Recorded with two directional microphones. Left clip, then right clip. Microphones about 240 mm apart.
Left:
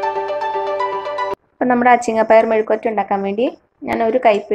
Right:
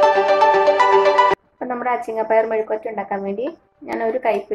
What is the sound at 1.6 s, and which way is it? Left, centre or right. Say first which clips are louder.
A woman's voice: left 9 dB; left.